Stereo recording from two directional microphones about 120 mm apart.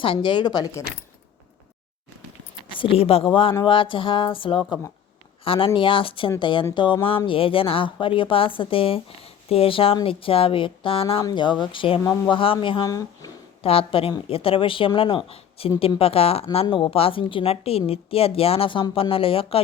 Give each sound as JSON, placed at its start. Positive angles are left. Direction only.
{"t": 0.0, "sound": "speech", "side_deg": 45}
{"t": 2.6, "sound": "a woman's voice", "side_deg": 45}
{"t": 12.8, "sound": "speech", "side_deg": 30}
{"t": 13.6, "sound": "a woman's voice", "side_deg": 50}
{"t": 16.6, "sound": "a woman's voice", "side_deg": 45}